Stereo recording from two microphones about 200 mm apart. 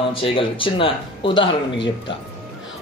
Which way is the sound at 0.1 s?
25° left (ahead or behind).